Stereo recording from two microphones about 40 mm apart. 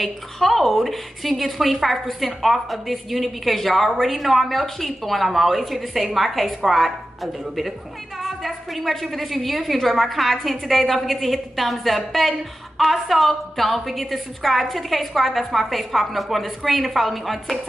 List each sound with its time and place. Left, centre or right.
0.0 s a woman's voice: centre